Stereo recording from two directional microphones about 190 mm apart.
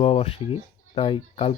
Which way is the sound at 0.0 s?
30° left (ahead or behind).